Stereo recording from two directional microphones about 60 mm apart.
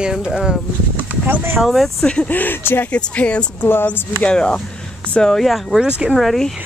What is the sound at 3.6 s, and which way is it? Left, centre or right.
Speech, left.